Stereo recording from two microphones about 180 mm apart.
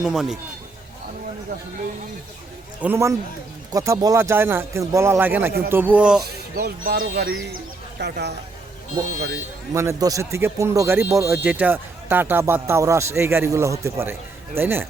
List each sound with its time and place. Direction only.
0.0 s speech: 5° right (ahead or behind)
2.8 s speech: 15° right (ahead or behind)
6.2 s speech: 60° right (ahead or behind)
9.7 s speech: 15° right (ahead or behind)